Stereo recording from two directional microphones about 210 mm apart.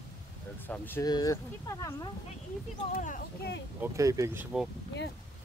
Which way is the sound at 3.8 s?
15° right (ahead or behind).